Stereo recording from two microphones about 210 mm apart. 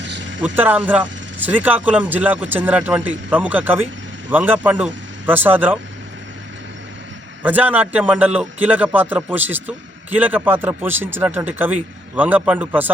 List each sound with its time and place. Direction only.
0.0 s vehicle: 60° right (ahead or behind)
0.4 s a man's voice: 10° right (ahead or behind)
7.4 s a man's voice: 10° right (ahead or behind)